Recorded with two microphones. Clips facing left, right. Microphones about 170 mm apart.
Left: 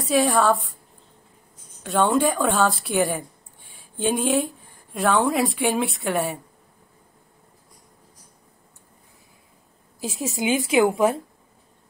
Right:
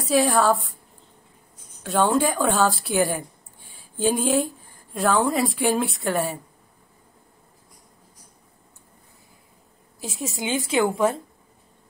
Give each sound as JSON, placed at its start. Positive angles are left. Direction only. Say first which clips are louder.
{"t": 0.0, "sound": "a woman's voice", "louder": "even", "side_deg": 0}
{"t": 1.8, "sound": "a woman's voice", "louder": "even", "side_deg": 0}
{"t": 10.1, "sound": "a woman's voice", "louder": "left 3 dB", "side_deg": 20}